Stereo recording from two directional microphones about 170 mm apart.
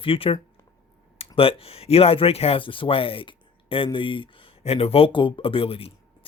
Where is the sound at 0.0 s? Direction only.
30° left (ahead or behind).